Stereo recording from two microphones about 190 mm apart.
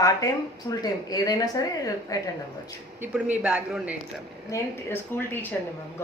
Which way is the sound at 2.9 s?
5° right (ahead or behind).